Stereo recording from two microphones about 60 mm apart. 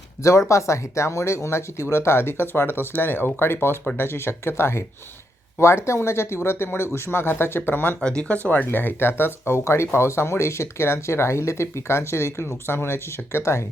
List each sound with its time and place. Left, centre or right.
0.2 s speech: left
8.0 s speech: centre
8.4 s speech: left